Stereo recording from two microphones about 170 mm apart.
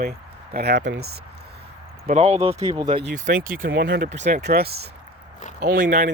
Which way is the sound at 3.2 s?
55° right (ahead or behind).